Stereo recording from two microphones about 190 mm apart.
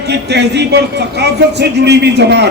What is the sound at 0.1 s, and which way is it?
A man's voice, 60° right (ahead or behind).